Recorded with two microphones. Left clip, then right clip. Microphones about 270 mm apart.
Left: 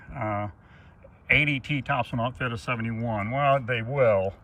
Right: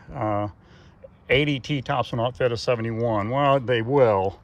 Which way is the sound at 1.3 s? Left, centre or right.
Centre.